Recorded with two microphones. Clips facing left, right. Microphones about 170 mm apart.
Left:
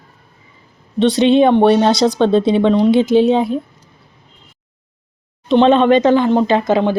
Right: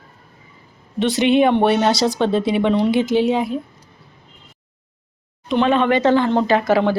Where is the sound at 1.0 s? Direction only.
25° left (ahead or behind).